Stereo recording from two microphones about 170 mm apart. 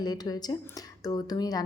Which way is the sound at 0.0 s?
25° left (ahead or behind).